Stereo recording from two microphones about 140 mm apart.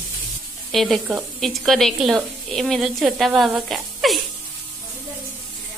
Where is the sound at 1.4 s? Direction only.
Centre (ahead or behind).